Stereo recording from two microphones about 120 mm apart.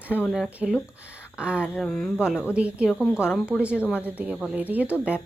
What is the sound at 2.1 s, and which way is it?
Speech, 5° right (ahead or behind).